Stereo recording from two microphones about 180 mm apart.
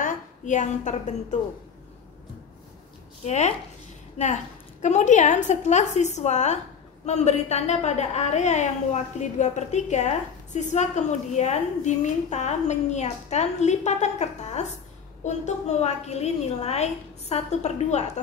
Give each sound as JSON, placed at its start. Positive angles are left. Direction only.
{"t": 0.0, "sound": "a woman's voice", "side_deg": 45}
{"t": 3.3, "sound": "a woman's voice", "side_deg": 40}